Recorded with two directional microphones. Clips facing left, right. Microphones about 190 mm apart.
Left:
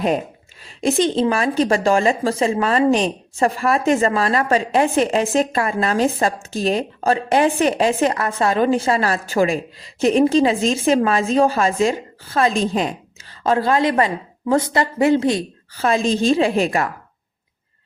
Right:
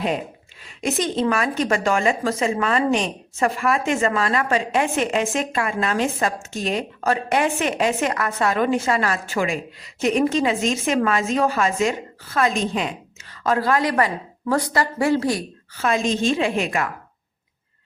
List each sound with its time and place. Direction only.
0.6 s a woman's voice: 30° left (ahead or behind)
15.7 s a woman's voice: 35° left (ahead or behind)